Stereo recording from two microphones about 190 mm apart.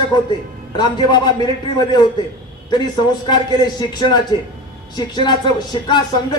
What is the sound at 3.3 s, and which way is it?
Speech, 20° left (ahead or behind).